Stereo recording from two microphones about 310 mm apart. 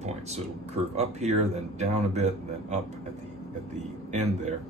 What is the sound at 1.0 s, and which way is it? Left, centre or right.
Speech, right.